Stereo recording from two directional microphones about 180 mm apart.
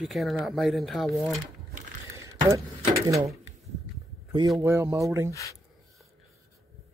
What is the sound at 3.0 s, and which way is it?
Speech, 15° right (ahead or behind).